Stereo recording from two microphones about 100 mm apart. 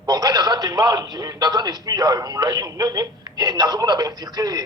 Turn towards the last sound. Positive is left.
turn(degrees=-40)  # may be behind; listen again after turning